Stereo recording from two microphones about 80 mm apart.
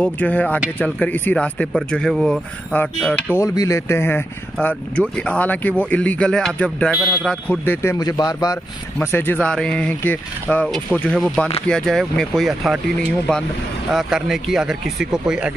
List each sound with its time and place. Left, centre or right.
0.0 s speech: centre
2.1 s speech: centre
3.1 s speech: centre
3.3 s speech: left
4.6 s speech: centre
7.6 s speech: left
8.0 s speech: left
9.0 s speech: left
9.4 s speech: centre
13.9 s speech: centre